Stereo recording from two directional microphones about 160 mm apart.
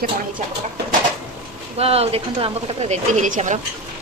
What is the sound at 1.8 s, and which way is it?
A woman's voice, 40° right (ahead or behind).